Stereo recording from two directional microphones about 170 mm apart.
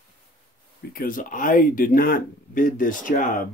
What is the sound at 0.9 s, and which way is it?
Speech, 55° left (ahead or behind).